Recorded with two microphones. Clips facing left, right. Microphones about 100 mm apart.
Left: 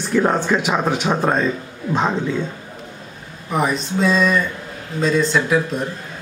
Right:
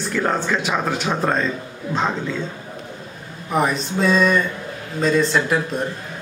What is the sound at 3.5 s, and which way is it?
A woman's voice, centre (ahead or behind).